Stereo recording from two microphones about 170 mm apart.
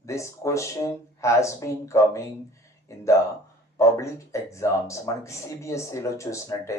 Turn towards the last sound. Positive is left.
turn(degrees=15)  # may be behind; listen again after turning